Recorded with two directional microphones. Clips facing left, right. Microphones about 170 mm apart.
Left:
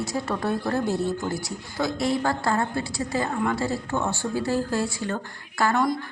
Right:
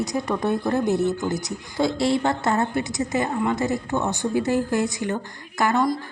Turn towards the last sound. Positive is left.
turn(degrees=-20)  # may be behind; listen again after turning